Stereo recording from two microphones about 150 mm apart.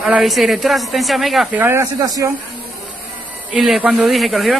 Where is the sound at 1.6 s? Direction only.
20° right (ahead or behind).